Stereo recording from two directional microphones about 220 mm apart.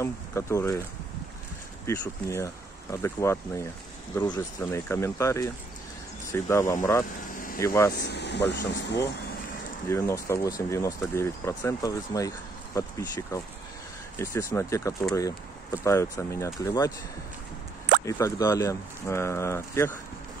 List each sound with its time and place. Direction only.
0.0 s speech: 10° left (ahead or behind)
1.9 s speech: 15° left (ahead or behind)
8.0 s speech: 50° left (ahead or behind)
9.8 s speech: 10° left (ahead or behind)
18.0 s speech: 15° left (ahead or behind)